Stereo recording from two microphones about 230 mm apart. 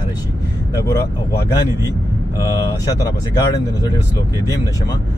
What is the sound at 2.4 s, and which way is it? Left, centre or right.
Speech, centre.